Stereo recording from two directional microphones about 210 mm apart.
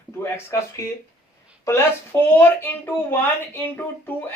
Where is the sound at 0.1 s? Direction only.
10° left (ahead or behind).